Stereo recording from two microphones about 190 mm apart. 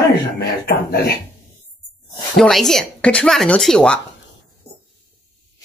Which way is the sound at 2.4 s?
Centre (ahead or behind).